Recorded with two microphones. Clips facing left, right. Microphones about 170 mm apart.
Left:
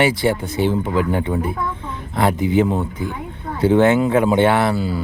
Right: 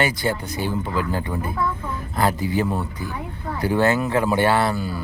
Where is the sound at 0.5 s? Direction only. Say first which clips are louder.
Left 6 dB; 25° left (ahead or behind).